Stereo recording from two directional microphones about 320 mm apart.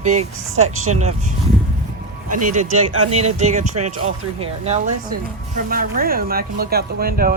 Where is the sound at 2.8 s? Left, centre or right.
Right.